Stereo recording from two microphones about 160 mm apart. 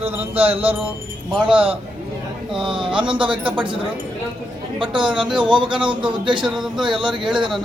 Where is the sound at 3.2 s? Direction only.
10° right (ahead or behind).